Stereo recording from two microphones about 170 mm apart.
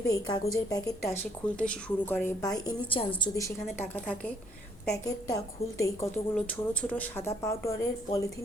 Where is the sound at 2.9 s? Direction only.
30° left (ahead or behind).